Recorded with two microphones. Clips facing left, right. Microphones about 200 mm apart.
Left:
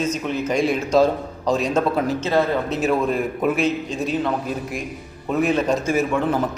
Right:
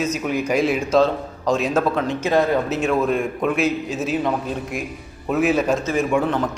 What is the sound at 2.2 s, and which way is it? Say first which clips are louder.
Speech: right 3 dB; 15° right (ahead or behind).